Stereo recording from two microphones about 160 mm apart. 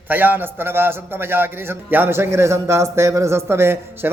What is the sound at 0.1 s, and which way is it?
Music, 10° right (ahead or behind).